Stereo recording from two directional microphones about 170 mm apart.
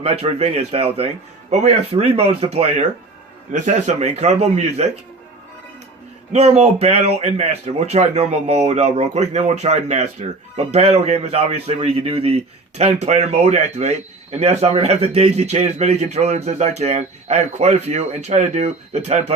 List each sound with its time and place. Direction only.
0.0 s a man's voice: 35° right (ahead or behind)
6.3 s a man's voice: 40° right (ahead or behind)